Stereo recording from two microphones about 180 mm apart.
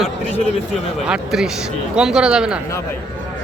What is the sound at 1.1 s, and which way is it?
Speech, centre (ahead or behind).